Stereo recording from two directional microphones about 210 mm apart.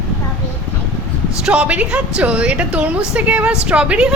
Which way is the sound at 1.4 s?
5° right (ahead or behind).